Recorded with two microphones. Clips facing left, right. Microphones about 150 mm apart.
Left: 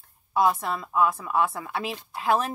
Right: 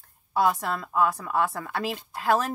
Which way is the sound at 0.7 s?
65° right (ahead or behind).